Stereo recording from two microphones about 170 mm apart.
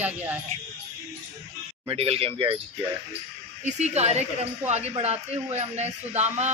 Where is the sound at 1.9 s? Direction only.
35° right (ahead or behind).